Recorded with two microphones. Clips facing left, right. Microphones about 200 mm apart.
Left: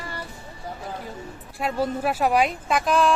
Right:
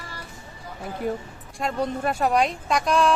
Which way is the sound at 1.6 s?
5° left (ahead or behind).